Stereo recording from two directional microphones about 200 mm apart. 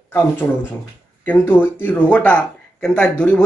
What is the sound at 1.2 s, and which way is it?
Speech, 10° left (ahead or behind).